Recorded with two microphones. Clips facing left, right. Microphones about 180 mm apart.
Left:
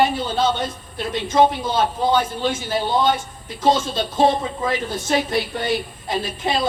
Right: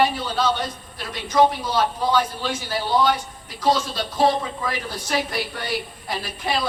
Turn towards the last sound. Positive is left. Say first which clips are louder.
# left 3 dB
turn(degrees=25)  # may be behind; listen again after turning